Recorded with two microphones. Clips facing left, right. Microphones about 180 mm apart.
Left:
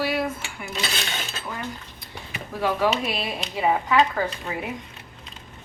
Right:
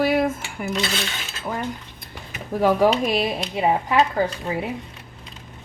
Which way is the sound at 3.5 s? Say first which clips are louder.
Right 1 dB; 30° right (ahead or behind).